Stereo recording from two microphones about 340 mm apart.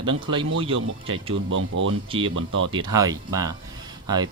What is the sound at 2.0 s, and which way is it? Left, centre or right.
Speech, centre.